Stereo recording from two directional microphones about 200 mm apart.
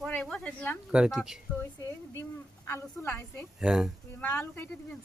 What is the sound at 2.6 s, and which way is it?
Speech, 10° left (ahead or behind).